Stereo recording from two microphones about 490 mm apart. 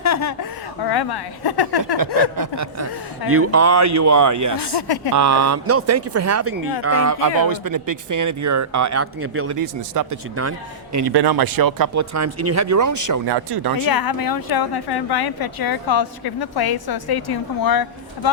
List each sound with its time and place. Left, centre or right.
0.0 s chuckle: left
0.8 s a woman's voice: left
2.3 s speech: right
3.2 s speech: right
4.6 s a woman's voice: left
5.1 s speech: right
9.6 s speech: right
10.9 s speech: right
13.2 s speech: right
13.8 s a woman's voice: left